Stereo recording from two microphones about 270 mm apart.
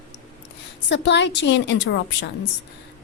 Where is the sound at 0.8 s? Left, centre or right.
Left.